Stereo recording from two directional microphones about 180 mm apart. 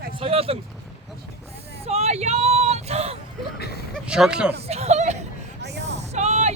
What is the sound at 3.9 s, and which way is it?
Speech, 5° right (ahead or behind).